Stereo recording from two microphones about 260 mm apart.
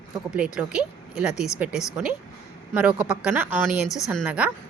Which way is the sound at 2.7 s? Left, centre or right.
Centre.